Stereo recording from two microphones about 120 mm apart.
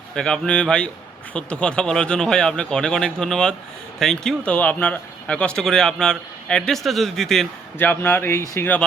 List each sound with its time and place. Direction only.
0.1 s speech: 5° left (ahead or behind)
7.8 s speech: 15° left (ahead or behind)